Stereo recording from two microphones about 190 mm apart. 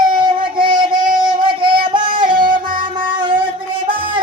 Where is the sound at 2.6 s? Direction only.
45° right (ahead or behind).